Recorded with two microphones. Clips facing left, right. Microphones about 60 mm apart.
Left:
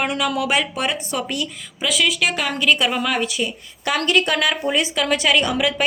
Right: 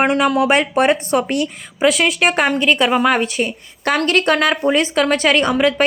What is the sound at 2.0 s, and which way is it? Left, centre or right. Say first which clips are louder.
A woman's voice: right 5 dB; right.